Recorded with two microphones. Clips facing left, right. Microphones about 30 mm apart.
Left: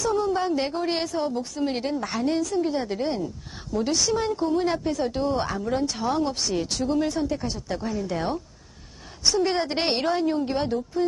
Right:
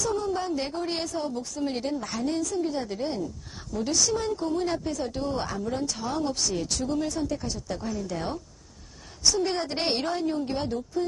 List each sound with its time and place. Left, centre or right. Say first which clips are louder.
0.0 s speech: left 4 dB; centre